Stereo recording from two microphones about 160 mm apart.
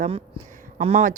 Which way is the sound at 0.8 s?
40° right (ahead or behind).